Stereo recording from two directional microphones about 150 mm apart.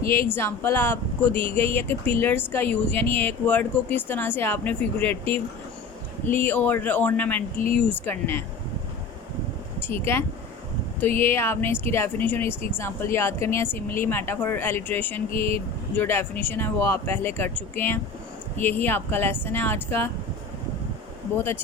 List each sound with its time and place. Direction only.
0.0 s speech: 15° left (ahead or behind)
6.4 s speech: 10° left (ahead or behind)
9.8 s speech: 15° left (ahead or behind)
21.3 s speech: 15° left (ahead or behind)